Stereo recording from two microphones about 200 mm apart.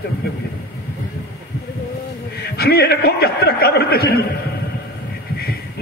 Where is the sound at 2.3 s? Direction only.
55° left (ahead or behind).